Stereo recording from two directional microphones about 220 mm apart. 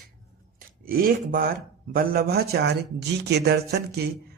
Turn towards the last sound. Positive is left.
turn(degrees=-45)  # may be behind; listen again after turning